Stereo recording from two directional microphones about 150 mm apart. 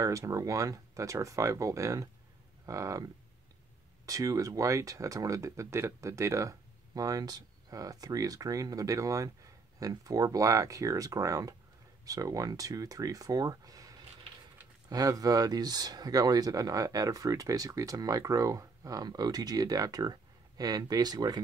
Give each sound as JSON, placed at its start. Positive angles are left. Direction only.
{"t": 0.0, "sound": "speech", "side_deg": -20}